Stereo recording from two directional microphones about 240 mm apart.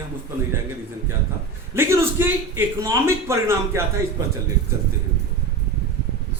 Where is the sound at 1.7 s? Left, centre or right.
Centre.